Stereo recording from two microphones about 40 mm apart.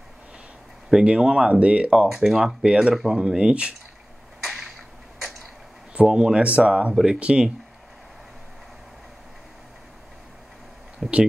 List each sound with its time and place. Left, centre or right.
1.0 s speech: right
2.0 s speech: centre
2.3 s speech: right
2.9 s speech: centre
4.4 s a sound: centre
5.2 s tick-tock: centre
6.0 s speech: right
11.0 s speech: centre